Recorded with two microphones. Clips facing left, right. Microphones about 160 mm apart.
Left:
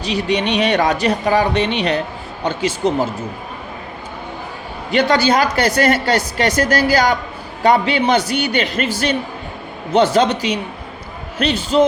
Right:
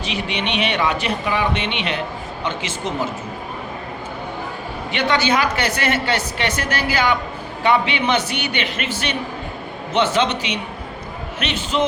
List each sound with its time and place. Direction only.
0.0 s speech: 40° left (ahead or behind)
4.9 s speech: 40° left (ahead or behind)